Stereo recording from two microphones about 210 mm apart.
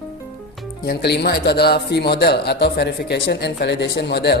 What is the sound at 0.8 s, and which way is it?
A man's voice, 50° left (ahead or behind).